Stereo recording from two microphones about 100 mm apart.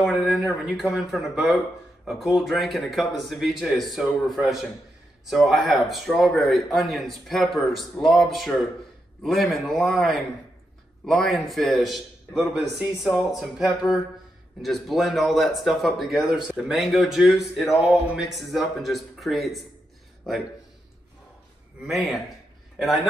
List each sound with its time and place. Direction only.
0.0 s speech: 5° right (ahead or behind)
5.2 s speech: 5° right (ahead or behind)
21.8 s speech: centre (ahead or behind)